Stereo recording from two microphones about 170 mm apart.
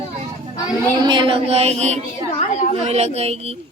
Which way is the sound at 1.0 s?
30° right (ahead or behind).